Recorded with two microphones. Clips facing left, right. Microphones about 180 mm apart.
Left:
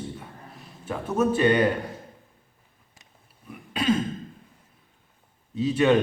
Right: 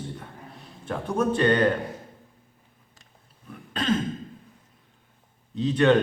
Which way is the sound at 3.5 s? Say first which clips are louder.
Left 2 dB; 10° left (ahead or behind).